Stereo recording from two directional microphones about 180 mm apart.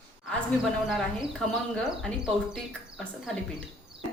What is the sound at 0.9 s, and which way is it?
Speech, centre (ahead or behind).